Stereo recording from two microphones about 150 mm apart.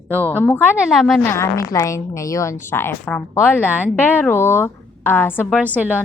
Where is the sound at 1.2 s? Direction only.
20° left (ahead or behind).